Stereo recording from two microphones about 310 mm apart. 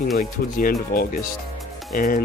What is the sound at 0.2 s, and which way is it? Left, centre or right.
Speech, left.